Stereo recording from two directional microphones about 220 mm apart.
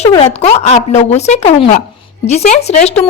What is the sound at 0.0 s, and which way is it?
A woman's voice, 25° left (ahead or behind).